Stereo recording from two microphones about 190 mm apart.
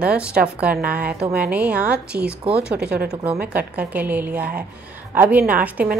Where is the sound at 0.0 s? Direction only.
5° right (ahead or behind).